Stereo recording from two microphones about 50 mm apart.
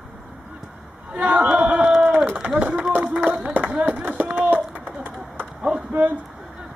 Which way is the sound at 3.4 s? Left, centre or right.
Right.